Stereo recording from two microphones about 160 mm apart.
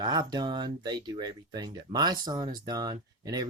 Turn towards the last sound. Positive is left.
turn(degrees=-25)  # may be behind; listen again after turning